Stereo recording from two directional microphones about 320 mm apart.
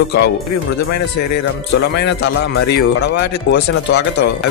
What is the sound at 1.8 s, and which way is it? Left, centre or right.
Speech, left.